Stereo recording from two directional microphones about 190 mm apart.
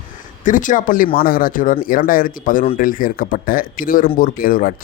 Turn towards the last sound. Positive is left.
turn(degrees=45)  # may be behind; listen again after turning